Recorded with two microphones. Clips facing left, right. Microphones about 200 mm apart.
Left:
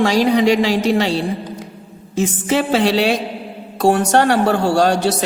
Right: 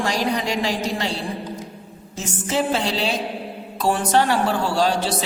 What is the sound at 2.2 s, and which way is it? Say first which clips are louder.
A woman's voice: left 6 dB; 80° left.